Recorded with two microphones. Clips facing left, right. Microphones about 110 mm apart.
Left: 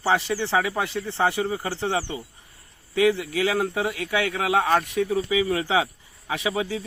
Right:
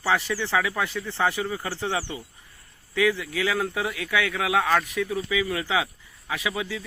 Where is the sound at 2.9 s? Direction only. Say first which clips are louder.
Left 3 dB; 50° left (ahead or behind).